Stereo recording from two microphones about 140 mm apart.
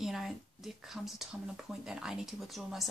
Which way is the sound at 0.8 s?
5° right (ahead or behind).